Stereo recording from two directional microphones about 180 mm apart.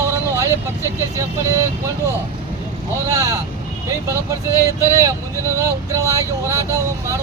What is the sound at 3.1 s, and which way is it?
Speech, 20° right (ahead or behind).